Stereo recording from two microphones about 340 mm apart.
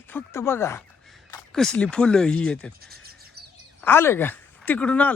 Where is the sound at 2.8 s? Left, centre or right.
Right.